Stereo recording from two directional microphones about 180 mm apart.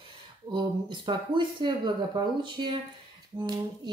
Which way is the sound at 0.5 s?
25° right (ahead or behind).